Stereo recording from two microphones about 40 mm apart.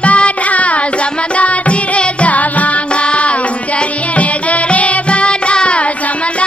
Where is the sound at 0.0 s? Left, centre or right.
Left.